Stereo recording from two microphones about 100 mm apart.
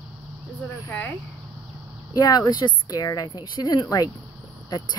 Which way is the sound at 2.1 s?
40° left (ahead or behind).